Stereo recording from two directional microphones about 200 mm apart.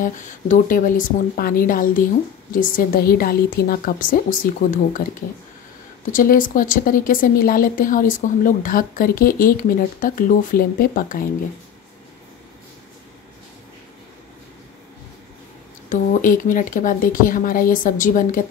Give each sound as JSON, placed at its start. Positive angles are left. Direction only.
{"t": 0.0, "sound": "speech", "side_deg": 40}
{"t": 6.1, "sound": "speech", "side_deg": 45}
{"t": 15.9, "sound": "speech", "side_deg": 40}